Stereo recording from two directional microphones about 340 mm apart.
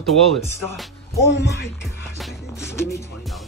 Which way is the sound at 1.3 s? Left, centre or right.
Left.